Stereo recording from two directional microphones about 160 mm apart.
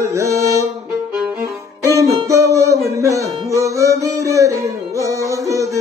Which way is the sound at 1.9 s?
20° right (ahead or behind).